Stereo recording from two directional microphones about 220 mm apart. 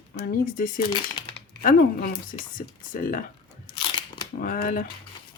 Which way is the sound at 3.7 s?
25° left (ahead or behind).